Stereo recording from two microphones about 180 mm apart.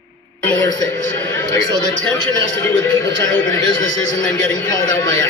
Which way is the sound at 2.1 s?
20° left (ahead or behind).